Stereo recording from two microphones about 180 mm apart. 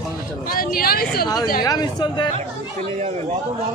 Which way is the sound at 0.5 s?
55° left (ahead or behind).